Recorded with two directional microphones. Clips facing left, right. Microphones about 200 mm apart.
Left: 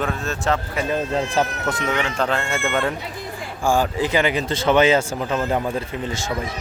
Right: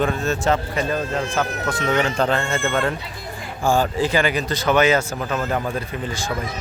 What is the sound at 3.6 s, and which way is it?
Speech, 15° left (ahead or behind).